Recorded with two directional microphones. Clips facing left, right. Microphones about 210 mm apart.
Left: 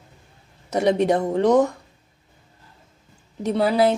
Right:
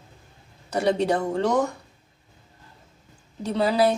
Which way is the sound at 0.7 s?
20° left (ahead or behind).